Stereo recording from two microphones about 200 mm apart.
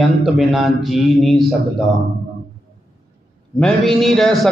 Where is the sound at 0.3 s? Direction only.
Centre (ahead or behind).